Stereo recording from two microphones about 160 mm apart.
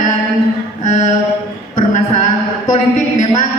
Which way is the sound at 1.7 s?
55° left (ahead or behind).